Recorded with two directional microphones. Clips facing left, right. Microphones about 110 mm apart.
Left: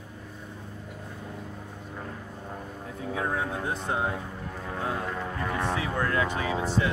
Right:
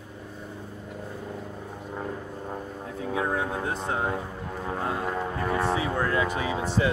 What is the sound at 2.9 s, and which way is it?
Speech, centre (ahead or behind).